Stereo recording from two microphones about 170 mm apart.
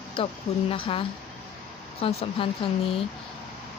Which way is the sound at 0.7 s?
30° left (ahead or behind).